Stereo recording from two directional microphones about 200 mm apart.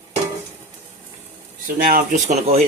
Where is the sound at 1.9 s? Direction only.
40° right (ahead or behind).